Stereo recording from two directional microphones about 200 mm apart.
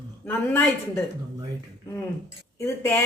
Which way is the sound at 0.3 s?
10° left (ahead or behind).